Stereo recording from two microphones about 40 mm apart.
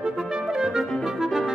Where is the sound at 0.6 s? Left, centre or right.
Centre.